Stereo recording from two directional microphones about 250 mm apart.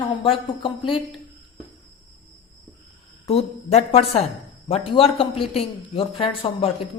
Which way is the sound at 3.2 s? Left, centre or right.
Left.